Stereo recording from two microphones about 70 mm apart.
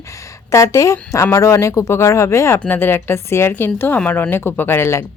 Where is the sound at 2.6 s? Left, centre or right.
Left.